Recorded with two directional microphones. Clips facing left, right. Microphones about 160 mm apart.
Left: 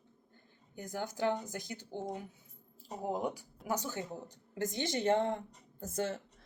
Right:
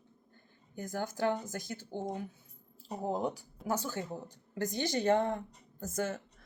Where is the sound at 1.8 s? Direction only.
20° right (ahead or behind).